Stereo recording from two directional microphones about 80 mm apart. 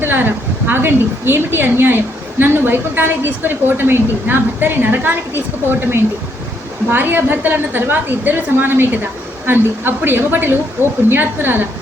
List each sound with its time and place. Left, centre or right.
0.0 s a woman's voice: right
6.9 s a woman's voice: right